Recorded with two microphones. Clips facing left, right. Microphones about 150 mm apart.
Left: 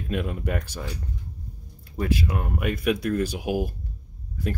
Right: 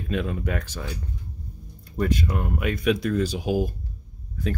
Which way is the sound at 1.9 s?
5° left (ahead or behind).